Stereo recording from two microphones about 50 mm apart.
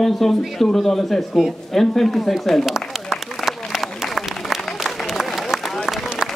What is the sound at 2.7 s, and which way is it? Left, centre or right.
Applause, centre.